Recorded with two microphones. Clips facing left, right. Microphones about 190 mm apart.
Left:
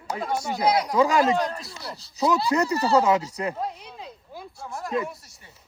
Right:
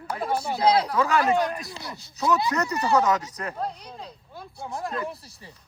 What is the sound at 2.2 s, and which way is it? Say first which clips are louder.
Speech: left 2 dB; 10° left (ahead or behind).